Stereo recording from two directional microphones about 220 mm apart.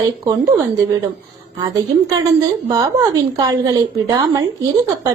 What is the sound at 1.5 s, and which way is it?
A woman's voice, 20° right (ahead or behind).